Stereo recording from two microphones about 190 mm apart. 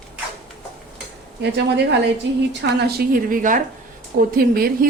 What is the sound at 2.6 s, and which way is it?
A man's voice, 60° right (ahead or behind).